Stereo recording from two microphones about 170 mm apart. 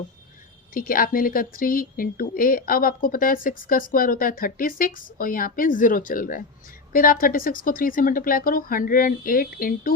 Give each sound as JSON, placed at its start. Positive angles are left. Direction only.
{"t": 0.7, "sound": "speech", "side_deg": 55}